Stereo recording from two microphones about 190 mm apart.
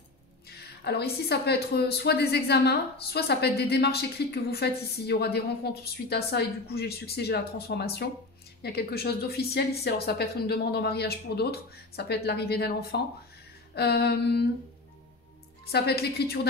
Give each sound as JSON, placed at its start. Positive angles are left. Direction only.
{"t": 0.8, "sound": "a woman's voice", "side_deg": 60}
{"t": 15.6, "sound": "a woman's voice", "side_deg": 55}